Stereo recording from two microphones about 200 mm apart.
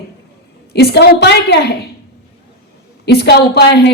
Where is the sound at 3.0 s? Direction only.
55° left (ahead or behind).